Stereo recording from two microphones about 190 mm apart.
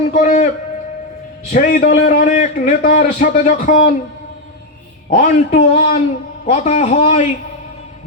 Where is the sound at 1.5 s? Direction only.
45° left (ahead or behind).